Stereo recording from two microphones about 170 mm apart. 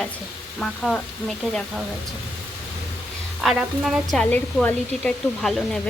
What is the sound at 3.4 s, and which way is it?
A woman's voice, centre (ahead or behind).